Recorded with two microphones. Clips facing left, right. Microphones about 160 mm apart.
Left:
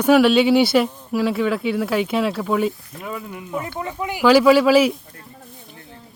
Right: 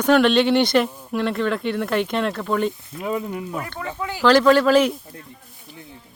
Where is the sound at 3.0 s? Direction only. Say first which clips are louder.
Right 6 dB; 25° right (ahead or behind).